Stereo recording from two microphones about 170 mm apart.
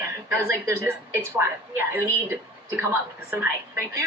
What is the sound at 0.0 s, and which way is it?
Speech, 15° right (ahead or behind).